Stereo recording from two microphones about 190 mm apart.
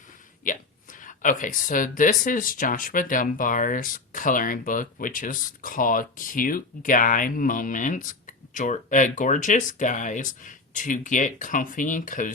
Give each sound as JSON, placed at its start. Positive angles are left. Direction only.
{"t": 0.4, "sound": "speech", "side_deg": 45}